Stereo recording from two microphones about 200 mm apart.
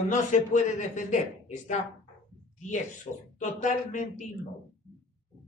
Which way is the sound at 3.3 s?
40° left (ahead or behind).